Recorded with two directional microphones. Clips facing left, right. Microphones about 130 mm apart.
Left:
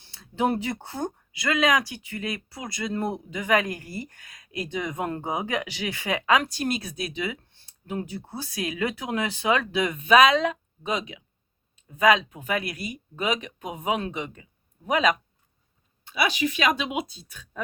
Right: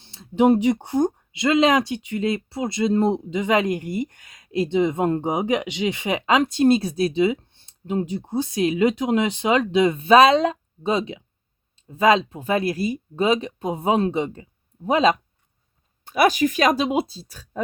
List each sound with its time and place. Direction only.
0.0 s speech: 25° right (ahead or behind)
16.0 s speech: 45° right (ahead or behind)